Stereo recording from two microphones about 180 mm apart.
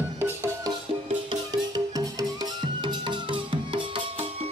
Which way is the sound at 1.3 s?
25° right (ahead or behind).